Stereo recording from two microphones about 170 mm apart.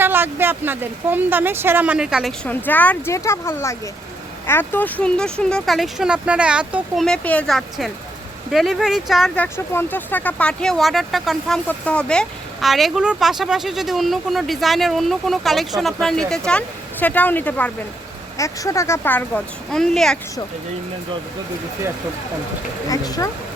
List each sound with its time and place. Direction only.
0.0 s speech: 10° right (ahead or behind)
2.5 s speech: 10° left (ahead or behind)
22.9 s speech: 20° left (ahead or behind)